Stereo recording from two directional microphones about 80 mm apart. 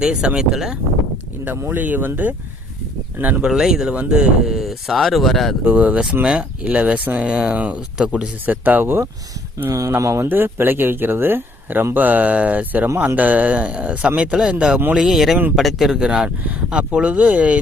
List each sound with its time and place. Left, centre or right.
0.0 s speech: centre
1.5 s speech: right
3.4 s speech: centre
5.6 s speech: centre
9.7 s speech: right
10.2 s speech: right